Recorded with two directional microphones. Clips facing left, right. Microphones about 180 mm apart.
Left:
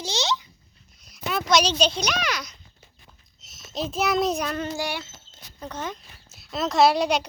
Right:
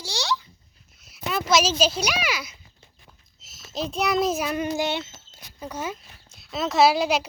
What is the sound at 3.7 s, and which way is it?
A child's voice, centre (ahead or behind).